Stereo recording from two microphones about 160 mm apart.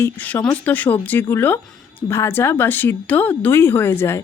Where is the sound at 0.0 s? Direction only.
15° left (ahead or behind).